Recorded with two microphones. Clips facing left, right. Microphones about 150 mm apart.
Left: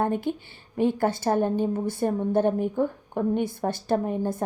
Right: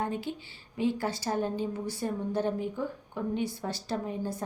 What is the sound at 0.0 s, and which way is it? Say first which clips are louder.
A woman's voice: left 7 dB; 55° left (ahead or behind).